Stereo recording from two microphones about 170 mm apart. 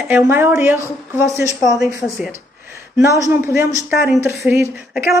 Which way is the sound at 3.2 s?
15° right (ahead or behind).